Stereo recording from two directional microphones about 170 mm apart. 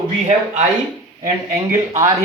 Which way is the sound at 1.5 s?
15° right (ahead or behind).